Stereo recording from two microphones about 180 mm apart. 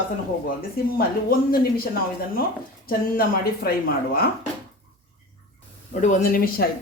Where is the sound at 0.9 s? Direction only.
55° left (ahead or behind).